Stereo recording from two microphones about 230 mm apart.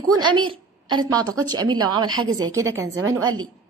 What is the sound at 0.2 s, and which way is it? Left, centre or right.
A woman's voice, right.